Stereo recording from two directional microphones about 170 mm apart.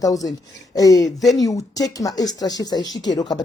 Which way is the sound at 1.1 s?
Centre (ahead or behind).